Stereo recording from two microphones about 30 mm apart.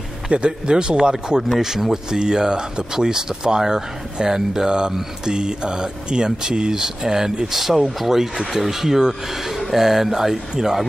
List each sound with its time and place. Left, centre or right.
0.3 s a man's voice: right
0.7 s speech: right
1.6 s speech: centre